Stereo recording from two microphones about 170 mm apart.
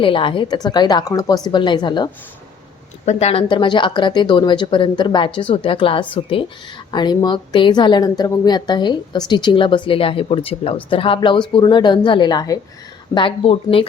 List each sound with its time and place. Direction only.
0.0 s a woman's voice: 30° left (ahead or behind)
3.1 s a woman's voice: 40° left (ahead or behind)